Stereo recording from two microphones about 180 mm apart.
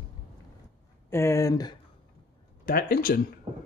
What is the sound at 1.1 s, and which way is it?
Speech, 15° left (ahead or behind).